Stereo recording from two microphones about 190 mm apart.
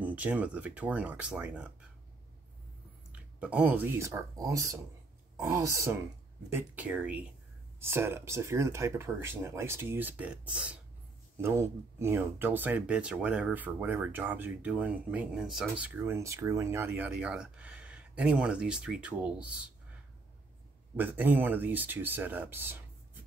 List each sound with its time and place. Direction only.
0.0 s speech: 10° right (ahead or behind)
3.1 s speech: 5° right (ahead or behind)
20.9 s speech: 10° right (ahead or behind)